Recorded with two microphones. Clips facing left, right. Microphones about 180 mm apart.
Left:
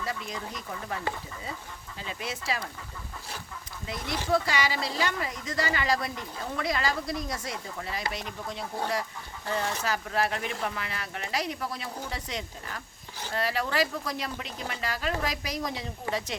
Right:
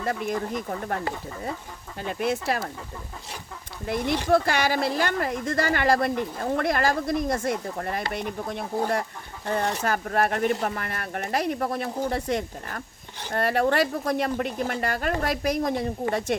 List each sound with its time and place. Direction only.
0.0 s a woman's voice: 55° right (ahead or behind)
3.8 s a woman's voice: 60° right (ahead or behind)
9.8 s speech: 55° right (ahead or behind)